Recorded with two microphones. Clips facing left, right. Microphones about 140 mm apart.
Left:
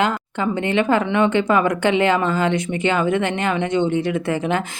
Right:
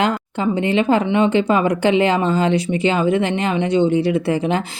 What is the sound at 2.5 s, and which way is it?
Speech, 35° right (ahead or behind).